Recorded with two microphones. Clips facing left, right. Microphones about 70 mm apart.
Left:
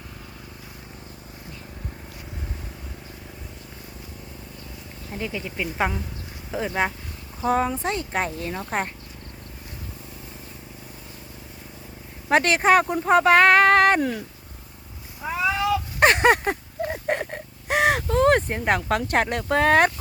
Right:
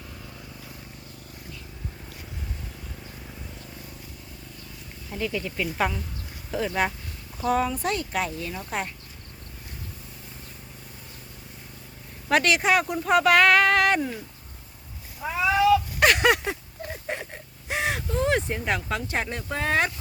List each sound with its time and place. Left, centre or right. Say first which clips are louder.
5.1 s speech: right 1 dB; centre
7.4 s speech: left 2 dB; left
12.3 s speech: left 3 dB; left
14.0 s speech: left 5 dB; left
15.2 s cat: even; centre
16.0 s a sound: left 3 dB; left